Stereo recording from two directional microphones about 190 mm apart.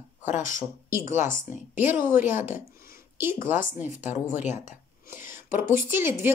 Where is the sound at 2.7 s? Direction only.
50° left (ahead or behind).